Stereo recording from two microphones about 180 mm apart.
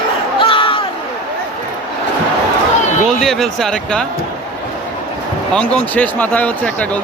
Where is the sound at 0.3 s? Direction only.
30° left (ahead or behind).